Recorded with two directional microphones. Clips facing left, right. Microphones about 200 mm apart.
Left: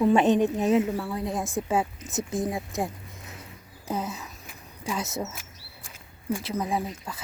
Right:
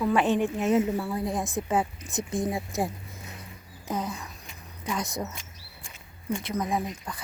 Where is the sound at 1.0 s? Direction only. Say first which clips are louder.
Even; centre (ahead or behind).